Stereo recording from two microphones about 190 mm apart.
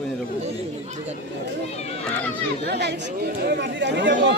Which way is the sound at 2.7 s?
60° right (ahead or behind).